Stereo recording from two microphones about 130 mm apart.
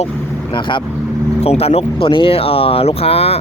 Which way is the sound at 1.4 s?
50° left (ahead or behind).